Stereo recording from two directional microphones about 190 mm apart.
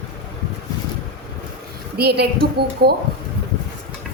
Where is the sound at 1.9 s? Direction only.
55° right (ahead or behind).